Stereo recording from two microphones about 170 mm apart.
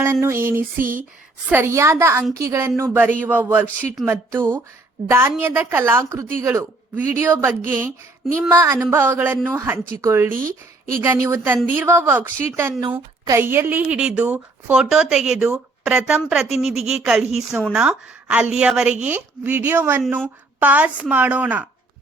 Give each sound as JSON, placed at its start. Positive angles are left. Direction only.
{"t": 0.0, "sound": "a woman's voice", "side_deg": -15}
{"t": 0.8, "sound": "speech", "side_deg": -55}
{"t": 1.5, "sound": "a woman's voice", "side_deg": -15}
{"t": 10.3, "sound": "speech", "side_deg": -55}
{"t": 11.0, "sound": "a woman's voice", "side_deg": -15}